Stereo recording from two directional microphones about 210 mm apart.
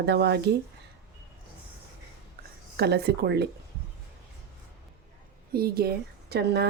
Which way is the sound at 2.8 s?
50° right (ahead or behind).